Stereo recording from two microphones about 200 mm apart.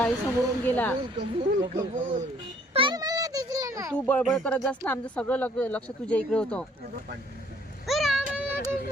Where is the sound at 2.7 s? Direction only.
20° right (ahead or behind).